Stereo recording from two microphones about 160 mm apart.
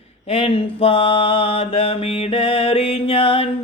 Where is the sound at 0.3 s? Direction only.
35° left (ahead or behind).